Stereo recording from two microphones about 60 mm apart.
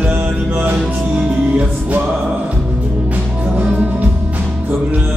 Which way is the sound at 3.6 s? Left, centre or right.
Right.